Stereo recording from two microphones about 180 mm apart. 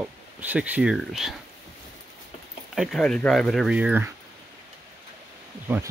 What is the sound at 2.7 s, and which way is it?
Speech, 5° left (ahead or behind).